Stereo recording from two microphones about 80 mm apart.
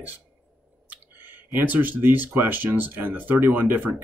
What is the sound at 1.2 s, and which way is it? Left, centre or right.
Speech, right.